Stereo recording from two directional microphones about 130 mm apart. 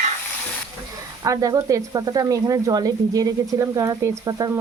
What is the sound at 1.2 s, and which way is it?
Speech, 25° right (ahead or behind).